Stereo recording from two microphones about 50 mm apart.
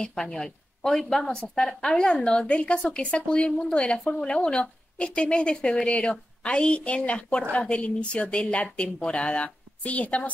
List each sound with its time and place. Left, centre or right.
0.0 s a woman's voice: centre; by 10.3 s left